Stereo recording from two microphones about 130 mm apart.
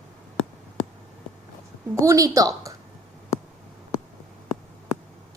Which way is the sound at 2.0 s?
25° right (ahead or behind).